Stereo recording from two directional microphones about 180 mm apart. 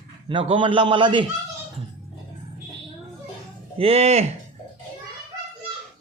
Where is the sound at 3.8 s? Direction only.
35° right (ahead or behind).